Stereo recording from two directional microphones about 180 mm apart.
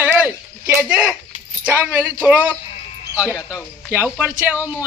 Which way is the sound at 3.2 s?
15° left (ahead or behind).